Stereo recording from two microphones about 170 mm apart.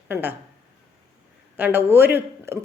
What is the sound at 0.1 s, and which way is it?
Speech, 10° right (ahead or behind).